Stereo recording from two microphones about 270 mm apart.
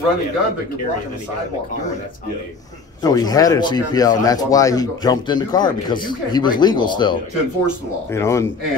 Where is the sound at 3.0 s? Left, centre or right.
Centre.